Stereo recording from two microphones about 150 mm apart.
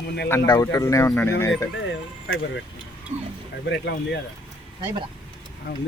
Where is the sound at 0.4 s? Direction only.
25° left (ahead or behind).